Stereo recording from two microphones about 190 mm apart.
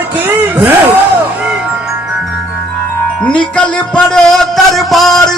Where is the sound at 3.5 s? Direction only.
5° left (ahead or behind).